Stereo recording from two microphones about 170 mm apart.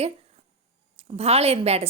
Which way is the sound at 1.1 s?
35° right (ahead or behind).